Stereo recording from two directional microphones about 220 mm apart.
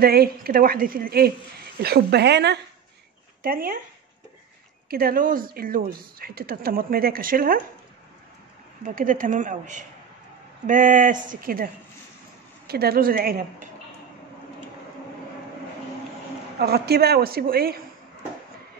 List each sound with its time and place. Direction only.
0.0 s a woman's voice: 45° right (ahead or behind)
4.8 s speech: 45° right (ahead or behind)
8.8 s a woman's voice: 35° right (ahead or behind)
16.5 s a woman's voice: 45° right (ahead or behind)